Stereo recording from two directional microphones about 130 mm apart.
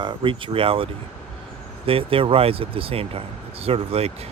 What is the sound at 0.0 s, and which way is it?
Speech, 40° right (ahead or behind).